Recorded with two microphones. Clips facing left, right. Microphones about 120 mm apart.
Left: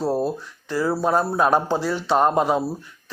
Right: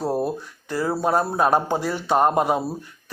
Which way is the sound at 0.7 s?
45° right (ahead or behind).